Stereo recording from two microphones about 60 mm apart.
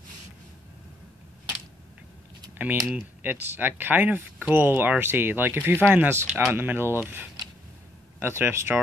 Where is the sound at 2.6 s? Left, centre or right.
Right.